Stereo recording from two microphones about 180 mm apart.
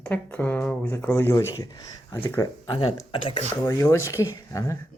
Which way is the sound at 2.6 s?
25° left (ahead or behind).